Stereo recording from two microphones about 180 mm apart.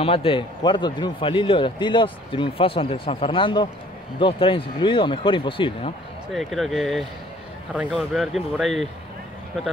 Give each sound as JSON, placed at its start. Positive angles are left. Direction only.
{"t": 0.0, "sound": "a man's voice", "side_deg": 30}
{"t": 6.3, "sound": "speech", "side_deg": 0}